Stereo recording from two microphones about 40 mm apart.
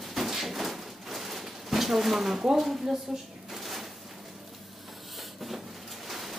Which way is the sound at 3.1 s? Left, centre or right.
Centre.